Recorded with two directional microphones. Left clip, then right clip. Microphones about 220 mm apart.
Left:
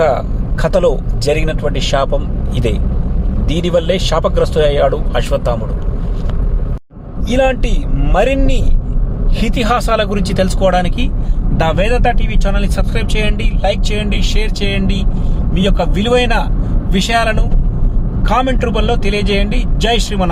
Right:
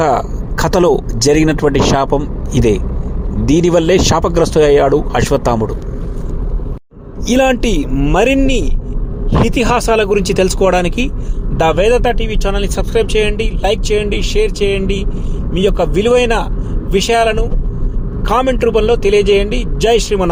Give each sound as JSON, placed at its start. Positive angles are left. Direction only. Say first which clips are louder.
{"t": 0.0, "sound": "speech", "louder": "even", "side_deg": -40}
{"t": 7.3, "sound": "speech", "louder": "right 2 dB", "side_deg": -40}